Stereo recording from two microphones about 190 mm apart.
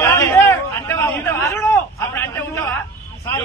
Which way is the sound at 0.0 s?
15° left (ahead or behind).